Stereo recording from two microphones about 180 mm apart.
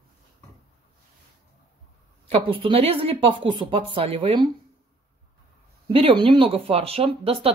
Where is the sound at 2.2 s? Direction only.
30° right (ahead or behind).